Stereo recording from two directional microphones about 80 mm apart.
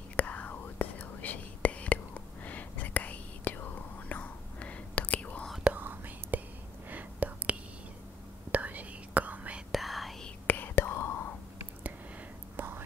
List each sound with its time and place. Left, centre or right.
0.1 s whispering: centre
5.6 s whispering: right
9.7 s whispering: centre
10.4 s whispering: left
12.5 s whispering: right